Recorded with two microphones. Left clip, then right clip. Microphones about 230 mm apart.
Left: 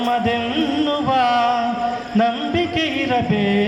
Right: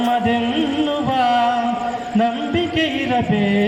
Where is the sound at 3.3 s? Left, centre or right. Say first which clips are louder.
Even; left.